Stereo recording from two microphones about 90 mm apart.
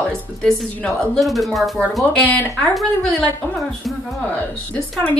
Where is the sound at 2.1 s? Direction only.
15° left (ahead or behind).